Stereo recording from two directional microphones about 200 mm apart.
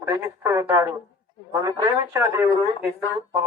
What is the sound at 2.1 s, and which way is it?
Speech, 10° right (ahead or behind).